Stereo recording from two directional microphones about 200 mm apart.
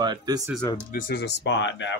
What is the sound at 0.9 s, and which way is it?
Speech, 55° left (ahead or behind).